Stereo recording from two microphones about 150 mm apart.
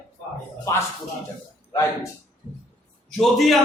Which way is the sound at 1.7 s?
20° left (ahead or behind).